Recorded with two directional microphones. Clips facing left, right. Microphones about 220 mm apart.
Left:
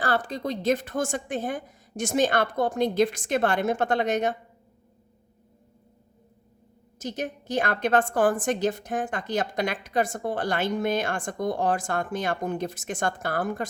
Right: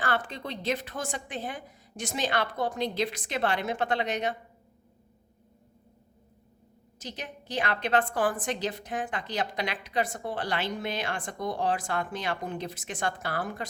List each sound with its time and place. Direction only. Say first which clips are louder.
0.0 s a woman's voice: left 4 dB; 35° left (ahead or behind)
7.0 s a woman's voice: left 9 dB; 45° left (ahead or behind)